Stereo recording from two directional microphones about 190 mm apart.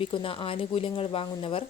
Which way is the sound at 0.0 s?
30° left (ahead or behind).